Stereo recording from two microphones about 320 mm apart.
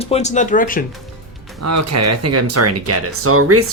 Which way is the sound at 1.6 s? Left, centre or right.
Right.